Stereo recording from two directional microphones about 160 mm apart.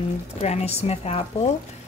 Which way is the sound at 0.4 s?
40° left (ahead or behind).